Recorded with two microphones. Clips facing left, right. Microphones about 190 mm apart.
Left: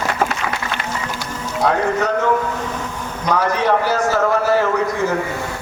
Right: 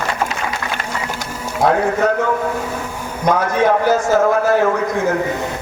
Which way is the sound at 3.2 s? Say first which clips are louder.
Right 3 dB; 50° right (ahead or behind).